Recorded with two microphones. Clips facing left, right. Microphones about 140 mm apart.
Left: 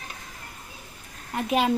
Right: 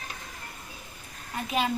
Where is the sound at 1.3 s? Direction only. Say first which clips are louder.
Left 5 dB; 70° left (ahead or behind).